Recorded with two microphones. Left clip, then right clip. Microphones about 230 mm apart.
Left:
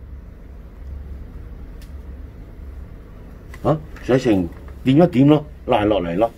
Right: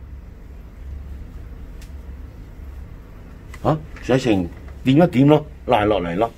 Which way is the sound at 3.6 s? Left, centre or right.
Centre.